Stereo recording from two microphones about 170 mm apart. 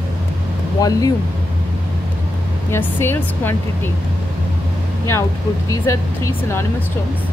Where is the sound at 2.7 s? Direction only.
15° left (ahead or behind).